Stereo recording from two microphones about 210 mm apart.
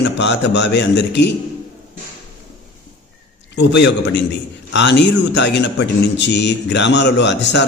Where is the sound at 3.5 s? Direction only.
55° left (ahead or behind).